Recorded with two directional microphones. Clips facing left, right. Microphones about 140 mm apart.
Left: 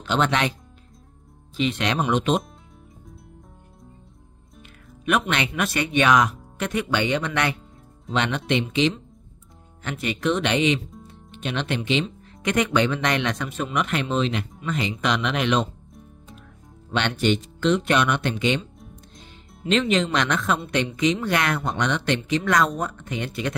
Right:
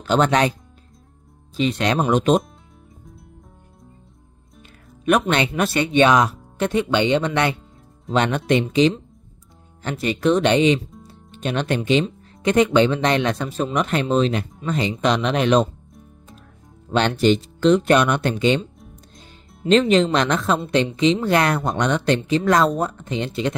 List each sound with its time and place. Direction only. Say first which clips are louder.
0.0 s speech: right 5 dB; 40° right (ahead or behind)
1.6 s speech: right 4 dB; 35° right (ahead or behind)
5.0 s speech: right 5 dB; 40° right (ahead or behind)
8.1 s speech: right 5 dB; 45° right (ahead or behind)
16.9 s speech: right 5 dB; 35° right (ahead or behind)
18.8 s music: even; centre (ahead or behind)
19.6 s speech: right 6 dB; 35° right (ahead or behind)